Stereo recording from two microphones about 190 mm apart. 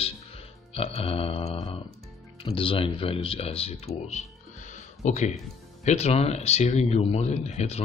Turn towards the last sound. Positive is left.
turn(degrees=35)  # may be behind; listen again after turning